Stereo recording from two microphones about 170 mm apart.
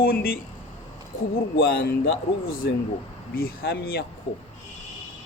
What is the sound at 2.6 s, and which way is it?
Speech, 75° left (ahead or behind).